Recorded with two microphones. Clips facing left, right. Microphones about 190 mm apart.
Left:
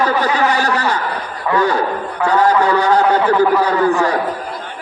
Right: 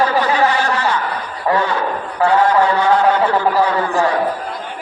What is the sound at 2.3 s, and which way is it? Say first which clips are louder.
A man's voice: left 1 dB; 40° left (ahead or behind).